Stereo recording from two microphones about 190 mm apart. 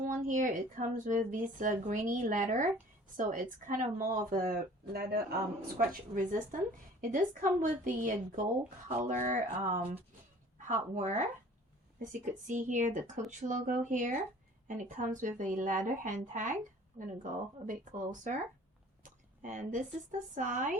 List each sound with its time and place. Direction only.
0.0 s a woman's voice: 45° right (ahead or behind)
5.7 s a woman's voice: 45° right (ahead or behind)
12.2 s a woman's voice: 40° right (ahead or behind)